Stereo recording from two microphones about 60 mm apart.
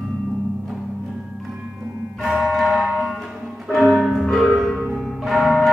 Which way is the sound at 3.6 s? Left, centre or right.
Centre.